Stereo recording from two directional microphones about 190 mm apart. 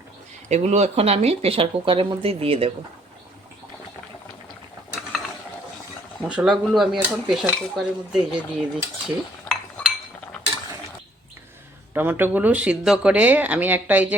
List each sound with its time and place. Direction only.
0.4 s speech: 35° right (ahead or behind)
6.2 s dishes: 5° right (ahead or behind)
11.9 s speech: 10° right (ahead or behind)